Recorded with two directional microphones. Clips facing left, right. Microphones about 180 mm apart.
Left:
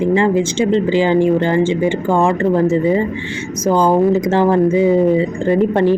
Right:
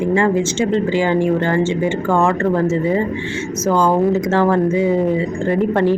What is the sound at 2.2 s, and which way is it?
Speech, 25° left (ahead or behind).